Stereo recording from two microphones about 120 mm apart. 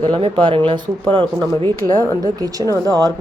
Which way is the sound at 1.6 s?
35° right (ahead or behind).